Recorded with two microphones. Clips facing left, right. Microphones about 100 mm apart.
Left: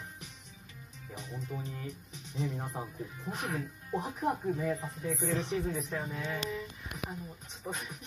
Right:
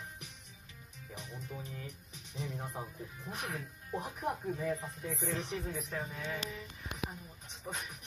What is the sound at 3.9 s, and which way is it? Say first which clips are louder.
Speech: left 4 dB; centre (ahead or behind).